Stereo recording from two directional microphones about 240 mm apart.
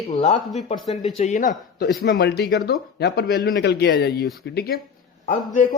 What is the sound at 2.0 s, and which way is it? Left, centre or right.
Speech, left.